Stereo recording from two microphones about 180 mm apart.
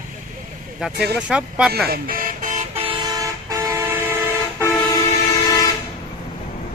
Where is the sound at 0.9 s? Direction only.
65° right (ahead or behind).